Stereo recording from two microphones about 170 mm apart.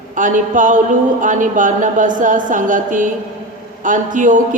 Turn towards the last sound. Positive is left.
turn(degrees=-50)  # may be behind; listen again after turning